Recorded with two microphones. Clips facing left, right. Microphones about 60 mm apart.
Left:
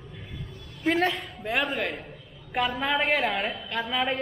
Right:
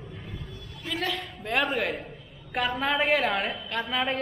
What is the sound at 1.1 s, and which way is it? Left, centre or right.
A woman's voice, centre.